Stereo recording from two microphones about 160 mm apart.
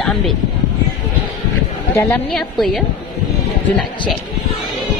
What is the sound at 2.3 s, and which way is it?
Speech, 5° left (ahead or behind).